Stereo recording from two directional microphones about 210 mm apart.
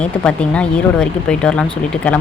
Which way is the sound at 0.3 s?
5° left (ahead or behind).